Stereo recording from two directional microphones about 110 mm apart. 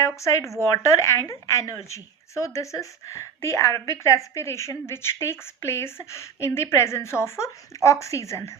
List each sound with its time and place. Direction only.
0.0 s speech: 25° left (ahead or behind)